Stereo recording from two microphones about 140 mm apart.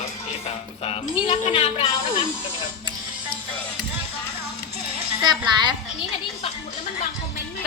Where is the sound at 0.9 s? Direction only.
40° left (ahead or behind).